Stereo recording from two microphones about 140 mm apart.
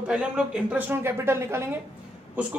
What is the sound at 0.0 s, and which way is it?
Speech, 5° right (ahead or behind).